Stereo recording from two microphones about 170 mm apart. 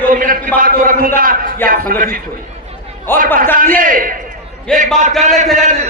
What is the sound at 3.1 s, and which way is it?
Speech, 10° left (ahead or behind).